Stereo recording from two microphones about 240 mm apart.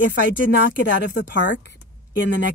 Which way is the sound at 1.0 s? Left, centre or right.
Left.